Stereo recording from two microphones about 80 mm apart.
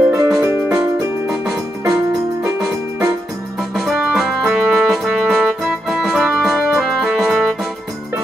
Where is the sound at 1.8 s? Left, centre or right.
Right.